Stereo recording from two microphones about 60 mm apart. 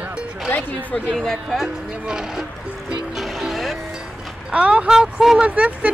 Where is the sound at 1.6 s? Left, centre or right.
Centre.